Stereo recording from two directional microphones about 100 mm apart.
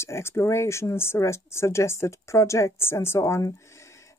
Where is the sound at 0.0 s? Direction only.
25° left (ahead or behind).